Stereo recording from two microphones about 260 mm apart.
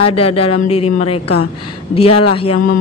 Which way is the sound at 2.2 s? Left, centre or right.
Left.